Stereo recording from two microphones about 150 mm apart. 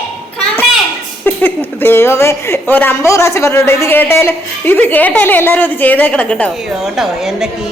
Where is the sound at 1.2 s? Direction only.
15° left (ahead or behind).